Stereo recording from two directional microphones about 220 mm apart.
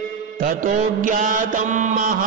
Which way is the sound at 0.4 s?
40° right (ahead or behind).